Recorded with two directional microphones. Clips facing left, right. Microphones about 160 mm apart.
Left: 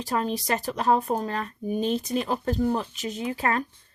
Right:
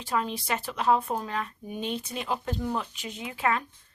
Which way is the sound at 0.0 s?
40° left (ahead or behind).